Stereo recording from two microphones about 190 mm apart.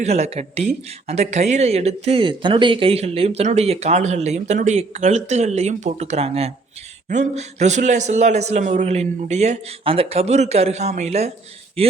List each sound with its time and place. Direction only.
0.0 s a man's voice: 35° right (ahead or behind)